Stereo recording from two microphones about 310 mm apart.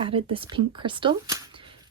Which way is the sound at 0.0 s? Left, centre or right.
Centre.